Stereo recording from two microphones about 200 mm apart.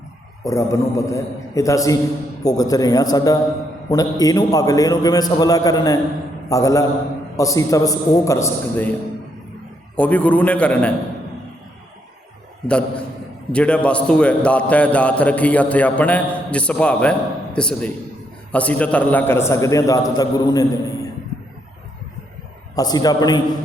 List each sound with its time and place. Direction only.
0.4 s a man's voice: 15° left (ahead or behind)
9.9 s a man's voice: 5° left (ahead or behind)
12.6 s a man's voice: 5° left (ahead or behind)
22.7 s a man's voice: 20° left (ahead or behind)